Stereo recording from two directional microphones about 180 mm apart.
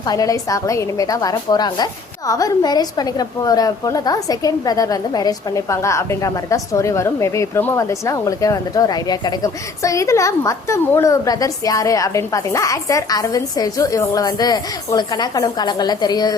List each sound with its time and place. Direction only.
0.0 s a woman's voice: 20° left (ahead or behind)